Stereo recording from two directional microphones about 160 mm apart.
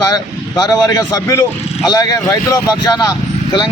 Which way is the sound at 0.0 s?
20° left (ahead or behind).